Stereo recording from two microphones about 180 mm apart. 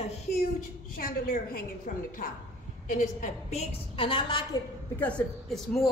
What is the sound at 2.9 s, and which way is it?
A woman's voice, 45° left (ahead or behind).